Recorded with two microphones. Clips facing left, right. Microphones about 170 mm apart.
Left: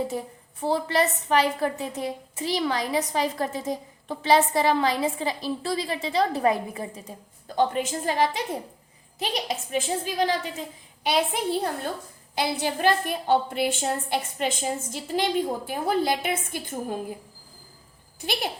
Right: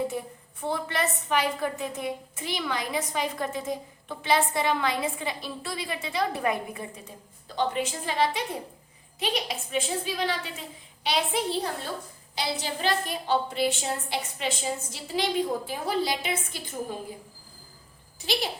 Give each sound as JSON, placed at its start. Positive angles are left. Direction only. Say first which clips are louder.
{"t": 0.6, "sound": "a woman's voice", "louder": "left 5 dB", "side_deg": 35}
{"t": 7.4, "sound": "a woman's voice", "louder": "left 4 dB", "side_deg": 50}
{"t": 18.2, "sound": "a woman's voice", "louder": "even", "side_deg": 50}